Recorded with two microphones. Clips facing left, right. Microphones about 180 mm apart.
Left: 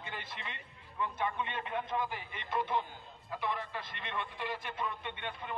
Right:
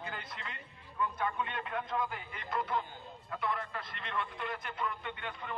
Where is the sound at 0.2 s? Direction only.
25° left (ahead or behind).